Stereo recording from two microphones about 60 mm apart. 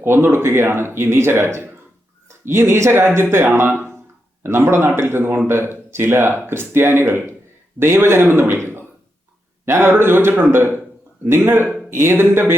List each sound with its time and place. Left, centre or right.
0.0 s speech: right